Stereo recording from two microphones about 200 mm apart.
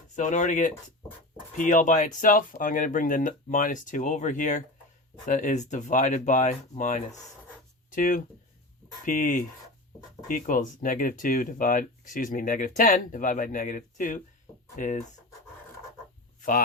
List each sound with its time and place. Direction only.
0.2 s speech: 40° left (ahead or behind)